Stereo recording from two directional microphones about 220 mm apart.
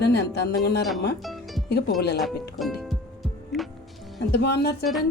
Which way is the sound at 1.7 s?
50° left (ahead or behind).